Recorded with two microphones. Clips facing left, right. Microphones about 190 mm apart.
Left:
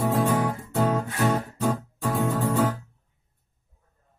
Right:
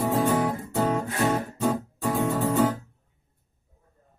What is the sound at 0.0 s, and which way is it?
Music, centre (ahead or behind).